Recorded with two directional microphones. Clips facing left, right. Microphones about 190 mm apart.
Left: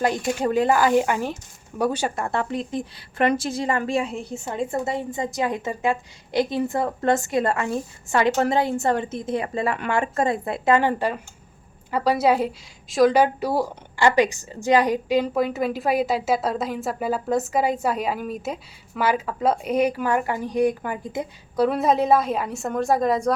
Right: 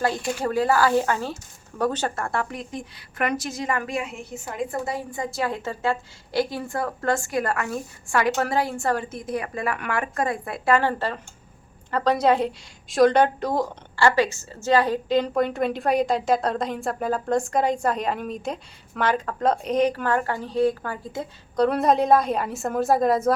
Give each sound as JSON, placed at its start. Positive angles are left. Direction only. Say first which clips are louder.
{"t": 0.0, "sound": "a woman's voice", "louder": "left 2 dB", "side_deg": 20}